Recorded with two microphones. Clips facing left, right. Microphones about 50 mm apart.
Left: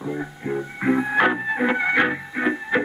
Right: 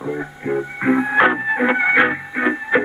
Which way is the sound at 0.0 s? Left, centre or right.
Centre.